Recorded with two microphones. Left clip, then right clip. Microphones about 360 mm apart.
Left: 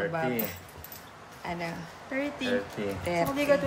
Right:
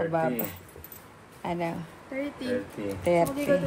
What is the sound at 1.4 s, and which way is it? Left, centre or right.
Speech, centre.